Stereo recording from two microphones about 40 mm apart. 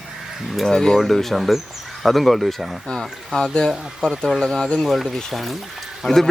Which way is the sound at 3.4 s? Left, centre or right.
Left.